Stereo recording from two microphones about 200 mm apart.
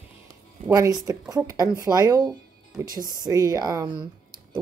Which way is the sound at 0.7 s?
20° right (ahead or behind).